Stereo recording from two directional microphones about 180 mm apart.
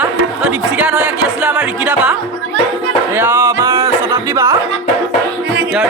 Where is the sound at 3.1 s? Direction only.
10° right (ahead or behind).